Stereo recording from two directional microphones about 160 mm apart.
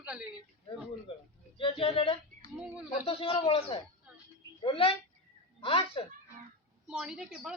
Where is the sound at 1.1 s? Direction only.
35° left (ahead or behind).